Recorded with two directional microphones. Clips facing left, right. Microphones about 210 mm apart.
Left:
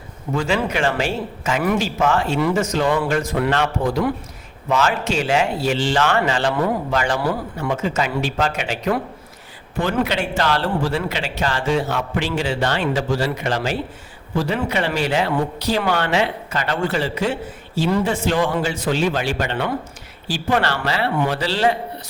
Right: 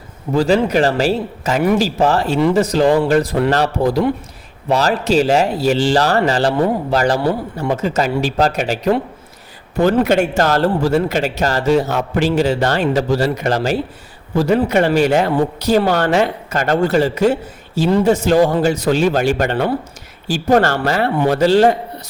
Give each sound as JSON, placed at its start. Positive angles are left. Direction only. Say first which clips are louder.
{"t": 0.3, "sound": "a man's voice", "louder": "right 7 dB", "side_deg": -35}